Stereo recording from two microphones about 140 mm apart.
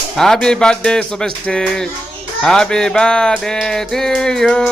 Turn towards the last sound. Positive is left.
turn(degrees=5)  # may be behind; listen again after turning